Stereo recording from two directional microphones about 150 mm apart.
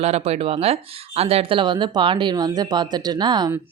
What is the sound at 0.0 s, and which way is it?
Speech, 45° right (ahead or behind).